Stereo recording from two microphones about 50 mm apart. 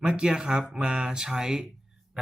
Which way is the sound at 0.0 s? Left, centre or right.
Centre.